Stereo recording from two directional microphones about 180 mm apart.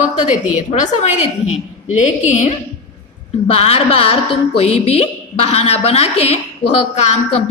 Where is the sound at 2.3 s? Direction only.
40° left (ahead or behind).